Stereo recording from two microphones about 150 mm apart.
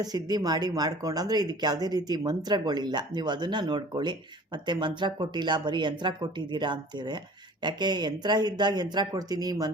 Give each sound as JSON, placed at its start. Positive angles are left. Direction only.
{"t": 0.0, "sound": "speech", "side_deg": -25}